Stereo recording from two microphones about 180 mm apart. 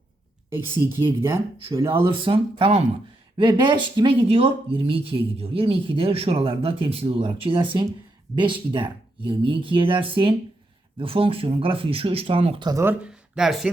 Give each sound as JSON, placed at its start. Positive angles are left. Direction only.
{"t": 0.9, "sound": "speech", "side_deg": -25}
{"t": 1.8, "sound": "speech", "side_deg": -10}
{"t": 2.0, "sound": "speech", "side_deg": -30}
{"t": 12.8, "sound": "speech", "side_deg": -10}